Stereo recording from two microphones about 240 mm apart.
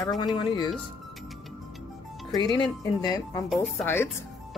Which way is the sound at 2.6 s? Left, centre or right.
Centre.